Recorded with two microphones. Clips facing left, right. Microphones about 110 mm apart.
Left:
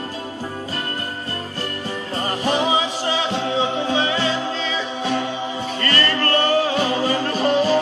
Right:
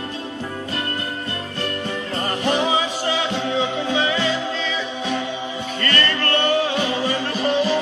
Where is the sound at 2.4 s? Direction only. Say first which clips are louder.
Even; 20° left (ahead or behind).